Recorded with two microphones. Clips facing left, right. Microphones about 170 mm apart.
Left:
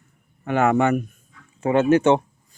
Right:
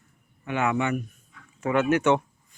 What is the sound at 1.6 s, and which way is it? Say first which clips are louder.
Speech: left 6 dB; 30° left (ahead or behind).